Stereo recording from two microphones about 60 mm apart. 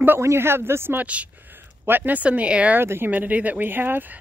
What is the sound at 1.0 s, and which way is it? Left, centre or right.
Speech, right.